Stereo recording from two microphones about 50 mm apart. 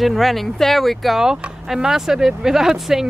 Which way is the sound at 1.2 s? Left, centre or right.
Centre.